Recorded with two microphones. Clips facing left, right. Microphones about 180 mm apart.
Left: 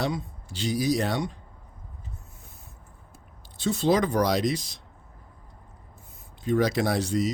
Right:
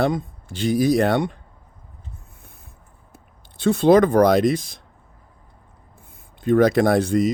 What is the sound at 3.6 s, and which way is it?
Speech, 55° right (ahead or behind).